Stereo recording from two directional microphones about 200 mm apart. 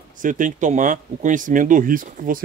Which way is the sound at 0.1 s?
40° right (ahead or behind).